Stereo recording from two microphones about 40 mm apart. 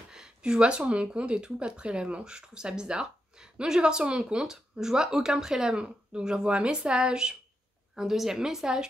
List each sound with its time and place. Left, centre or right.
0.1 s a sound: centre
1.1 s speech: right
4.4 s speech: centre
7.9 s a woman's voice: centre